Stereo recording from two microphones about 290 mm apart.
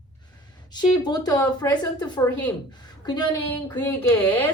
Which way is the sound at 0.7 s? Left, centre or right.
Centre.